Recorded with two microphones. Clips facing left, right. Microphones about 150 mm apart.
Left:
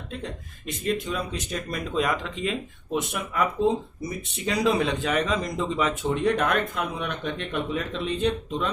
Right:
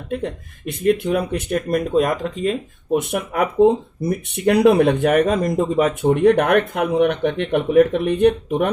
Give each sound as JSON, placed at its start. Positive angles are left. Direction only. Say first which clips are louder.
{"t": 0.1, "sound": "speech", "louder": "right 12 dB", "side_deg": -60}